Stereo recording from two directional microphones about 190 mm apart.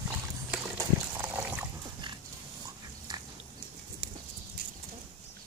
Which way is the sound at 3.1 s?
20° right (ahead or behind).